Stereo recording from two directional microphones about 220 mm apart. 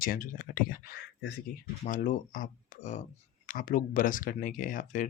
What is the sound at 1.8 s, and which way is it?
Speech, 35° left (ahead or behind).